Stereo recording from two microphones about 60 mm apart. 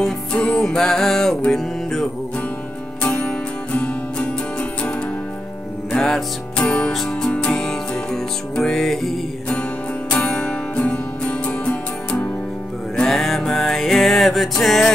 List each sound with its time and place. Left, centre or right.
0.3 s music: centre
3.0 s music: left
5.9 s music: centre
6.6 s music: left
6.9 s music: centre
10.1 s music: centre